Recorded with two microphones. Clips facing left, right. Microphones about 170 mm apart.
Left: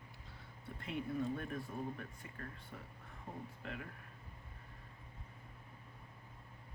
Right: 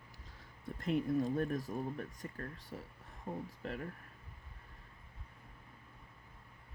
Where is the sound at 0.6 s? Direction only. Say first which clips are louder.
Right 8 dB; 40° right (ahead or behind).